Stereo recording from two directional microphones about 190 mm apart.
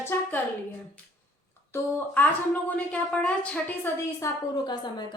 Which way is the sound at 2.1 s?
10° left (ahead or behind).